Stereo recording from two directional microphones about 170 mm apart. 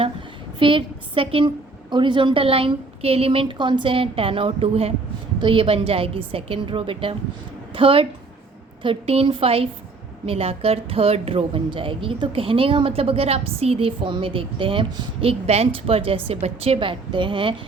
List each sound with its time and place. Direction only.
0.6 s a woman's voice: 30° right (ahead or behind)